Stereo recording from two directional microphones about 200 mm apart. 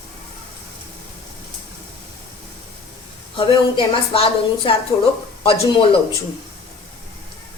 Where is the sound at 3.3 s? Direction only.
25° left (ahead or behind).